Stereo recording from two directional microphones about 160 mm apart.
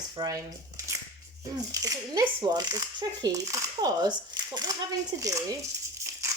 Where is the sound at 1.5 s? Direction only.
20° right (ahead or behind).